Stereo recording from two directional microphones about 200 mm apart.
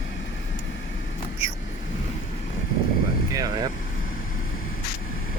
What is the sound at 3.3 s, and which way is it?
Vehicle, 20° right (ahead or behind).